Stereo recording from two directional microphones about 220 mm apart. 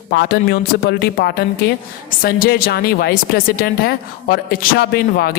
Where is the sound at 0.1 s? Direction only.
45° left (ahead or behind).